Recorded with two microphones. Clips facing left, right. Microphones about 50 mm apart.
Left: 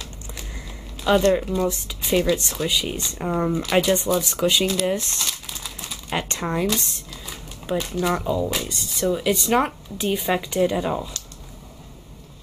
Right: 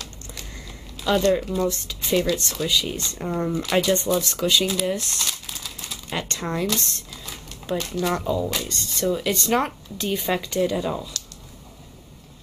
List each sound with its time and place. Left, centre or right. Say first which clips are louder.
1.1 s speech: left 2 dB; centre